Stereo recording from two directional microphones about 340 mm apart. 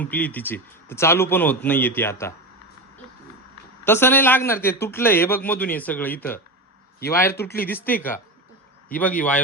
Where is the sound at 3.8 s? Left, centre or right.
Centre.